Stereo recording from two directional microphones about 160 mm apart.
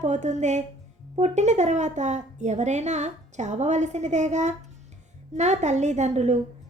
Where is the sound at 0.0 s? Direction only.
45° right (ahead or behind).